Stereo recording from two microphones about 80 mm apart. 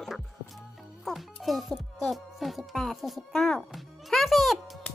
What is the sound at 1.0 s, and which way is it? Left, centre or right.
Speech, centre.